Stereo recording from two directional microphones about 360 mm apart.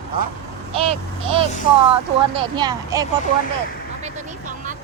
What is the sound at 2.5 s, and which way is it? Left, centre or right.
Speech, centre.